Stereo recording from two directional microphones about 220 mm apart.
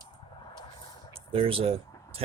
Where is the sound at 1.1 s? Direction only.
25° right (ahead or behind).